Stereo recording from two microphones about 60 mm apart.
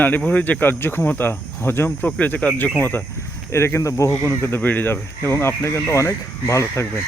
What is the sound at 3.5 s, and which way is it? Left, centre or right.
Speech, left.